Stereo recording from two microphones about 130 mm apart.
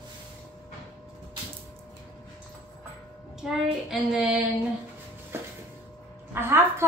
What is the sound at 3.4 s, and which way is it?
Child singing, 5° right (ahead or behind).